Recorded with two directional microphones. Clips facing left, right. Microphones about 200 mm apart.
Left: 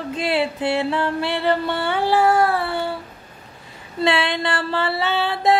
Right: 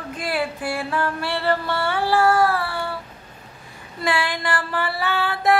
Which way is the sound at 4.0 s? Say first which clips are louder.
Left 4 dB; 25° left (ahead or behind).